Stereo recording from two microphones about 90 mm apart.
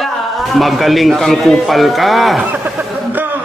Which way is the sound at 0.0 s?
Centre (ahead or behind).